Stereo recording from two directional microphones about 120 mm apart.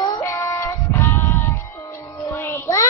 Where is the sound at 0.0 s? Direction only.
25° left (ahead or behind).